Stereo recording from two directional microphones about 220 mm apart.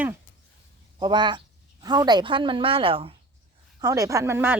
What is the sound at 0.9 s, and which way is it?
A woman's voice, 20° right (ahead or behind).